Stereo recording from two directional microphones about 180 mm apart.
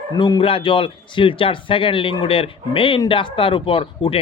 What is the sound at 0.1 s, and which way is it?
A man's voice, 25° left (ahead or behind).